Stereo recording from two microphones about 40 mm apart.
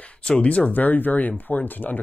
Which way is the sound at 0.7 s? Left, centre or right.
Left.